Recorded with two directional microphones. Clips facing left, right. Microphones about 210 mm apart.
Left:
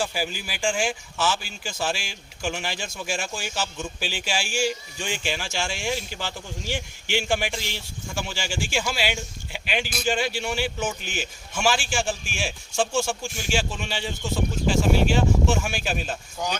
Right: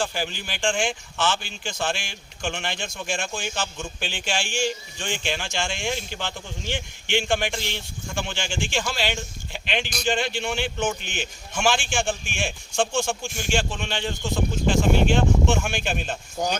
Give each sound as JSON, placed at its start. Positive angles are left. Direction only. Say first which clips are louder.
{"t": 0.0, "sound": "a man's voice", "louder": "even", "side_deg": 5}
{"t": 16.4, "sound": "speech", "louder": "right 4 dB", "side_deg": -45}